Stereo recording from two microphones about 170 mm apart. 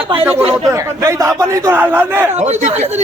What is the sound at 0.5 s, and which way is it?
A man's voice, 20° right (ahead or behind).